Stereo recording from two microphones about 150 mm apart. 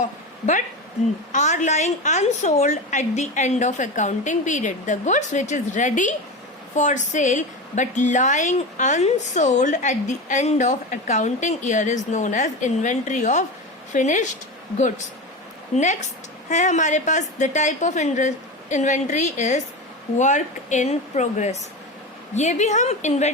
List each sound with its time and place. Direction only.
1.3 s a woman's voice: 55° left (ahead or behind)